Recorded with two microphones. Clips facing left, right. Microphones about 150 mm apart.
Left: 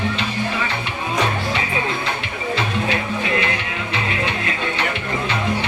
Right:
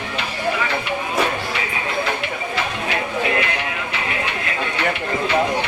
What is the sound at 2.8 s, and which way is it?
Music, 25° left (ahead or behind).